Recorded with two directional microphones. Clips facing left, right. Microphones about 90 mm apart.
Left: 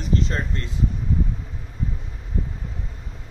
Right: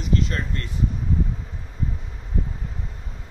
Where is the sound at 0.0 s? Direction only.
30° left (ahead or behind).